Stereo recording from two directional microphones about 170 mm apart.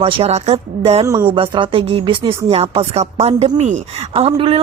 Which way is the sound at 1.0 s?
20° right (ahead or behind).